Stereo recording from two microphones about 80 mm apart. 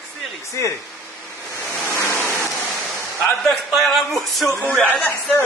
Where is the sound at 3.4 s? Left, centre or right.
Centre.